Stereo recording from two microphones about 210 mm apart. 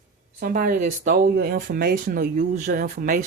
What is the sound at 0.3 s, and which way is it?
Speech, 40° right (ahead or behind).